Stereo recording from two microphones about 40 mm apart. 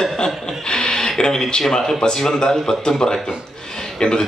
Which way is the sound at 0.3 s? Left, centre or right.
Centre.